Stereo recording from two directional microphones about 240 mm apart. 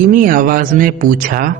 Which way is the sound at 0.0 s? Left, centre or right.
Right.